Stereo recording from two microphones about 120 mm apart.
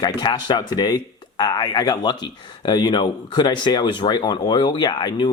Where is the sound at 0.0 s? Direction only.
35° left (ahead or behind).